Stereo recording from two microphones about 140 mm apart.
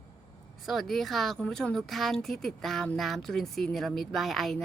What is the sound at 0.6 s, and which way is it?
Speech, centre (ahead or behind).